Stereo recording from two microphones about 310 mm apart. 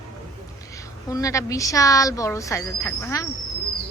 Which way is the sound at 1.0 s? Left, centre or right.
Centre.